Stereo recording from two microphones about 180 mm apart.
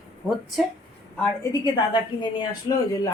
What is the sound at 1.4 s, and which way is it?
Speech, 20° left (ahead or behind).